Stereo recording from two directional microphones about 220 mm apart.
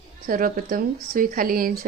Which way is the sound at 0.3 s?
40° right (ahead or behind).